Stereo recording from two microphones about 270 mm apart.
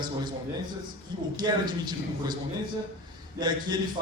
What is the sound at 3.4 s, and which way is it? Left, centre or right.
Speech, centre.